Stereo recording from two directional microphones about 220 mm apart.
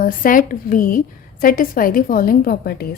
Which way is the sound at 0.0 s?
40° left (ahead or behind).